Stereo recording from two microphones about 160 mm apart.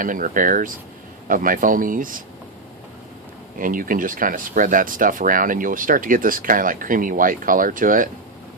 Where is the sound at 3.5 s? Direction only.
60° right (ahead or behind).